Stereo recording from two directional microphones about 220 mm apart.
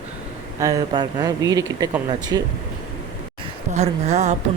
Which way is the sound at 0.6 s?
15° right (ahead or behind).